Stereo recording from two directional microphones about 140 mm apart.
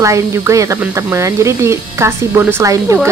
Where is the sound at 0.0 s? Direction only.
20° right (ahead or behind).